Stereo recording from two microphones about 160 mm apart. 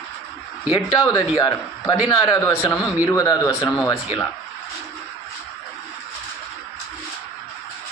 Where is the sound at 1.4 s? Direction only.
25° left (ahead or behind).